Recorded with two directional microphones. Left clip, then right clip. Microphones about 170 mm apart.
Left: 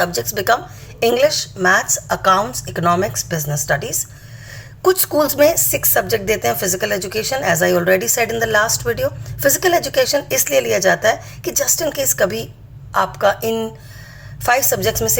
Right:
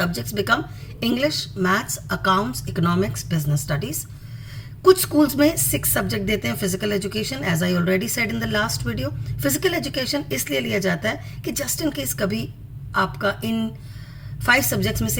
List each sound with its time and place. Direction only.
0.0 s speech: 15° right (ahead or behind)